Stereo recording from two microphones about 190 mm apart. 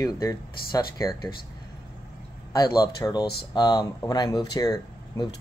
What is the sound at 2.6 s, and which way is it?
Speech, 20° left (ahead or behind).